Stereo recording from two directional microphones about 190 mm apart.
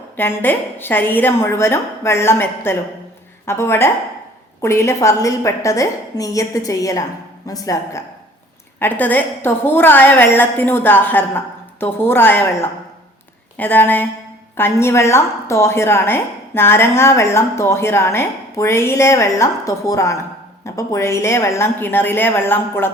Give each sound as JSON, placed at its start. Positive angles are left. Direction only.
{"t": 0.2, "sound": "a woman's voice", "side_deg": 10}